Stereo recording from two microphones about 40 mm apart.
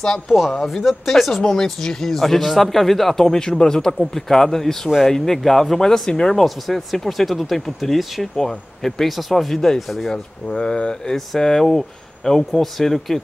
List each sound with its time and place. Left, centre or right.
0.5 s speech: centre
1.4 s speech: centre
10.0 s speech: centre
11.1 s speech: centre